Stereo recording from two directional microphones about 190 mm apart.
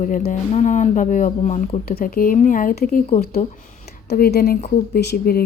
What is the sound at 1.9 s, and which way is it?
Speech, 50° left (ahead or behind).